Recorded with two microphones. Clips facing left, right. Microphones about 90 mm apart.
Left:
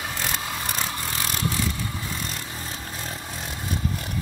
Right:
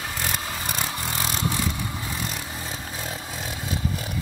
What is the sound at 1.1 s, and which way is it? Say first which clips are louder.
Vehicle: right 1 dB; 20° right (ahead or behind).